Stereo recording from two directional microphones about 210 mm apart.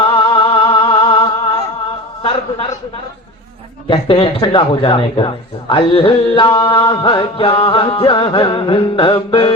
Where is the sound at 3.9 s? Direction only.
25° left (ahead or behind).